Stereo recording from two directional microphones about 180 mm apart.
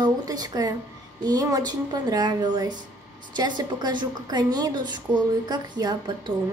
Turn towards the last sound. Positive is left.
turn(degrees=-20)  # may be behind; listen again after turning